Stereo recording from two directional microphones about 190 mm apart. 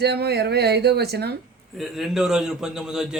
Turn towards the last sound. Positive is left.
turn(degrees=-5)  # may be behind; listen again after turning